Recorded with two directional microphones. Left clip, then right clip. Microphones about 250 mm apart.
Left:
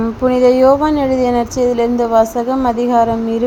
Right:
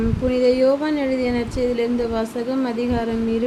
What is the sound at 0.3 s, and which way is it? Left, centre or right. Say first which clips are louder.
A woman's voice: left 7 dB; left.